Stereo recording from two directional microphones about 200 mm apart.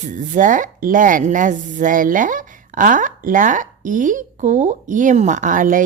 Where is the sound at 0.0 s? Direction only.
40° right (ahead or behind).